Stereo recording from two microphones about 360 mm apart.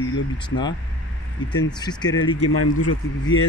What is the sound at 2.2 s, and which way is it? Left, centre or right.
Speech, left.